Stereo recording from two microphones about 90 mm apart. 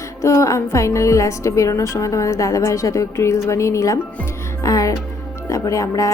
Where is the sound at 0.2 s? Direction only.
30° left (ahead or behind).